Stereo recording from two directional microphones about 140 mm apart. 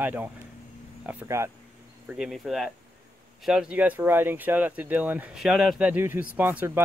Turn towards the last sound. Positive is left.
turn(degrees=-10)  # may be behind; listen again after turning